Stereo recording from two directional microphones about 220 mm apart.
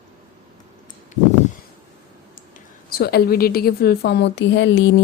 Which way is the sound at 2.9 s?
45° left (ahead or behind).